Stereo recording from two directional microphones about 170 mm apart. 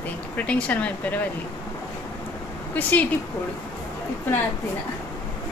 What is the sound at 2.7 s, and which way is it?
Speech, 10° left (ahead or behind).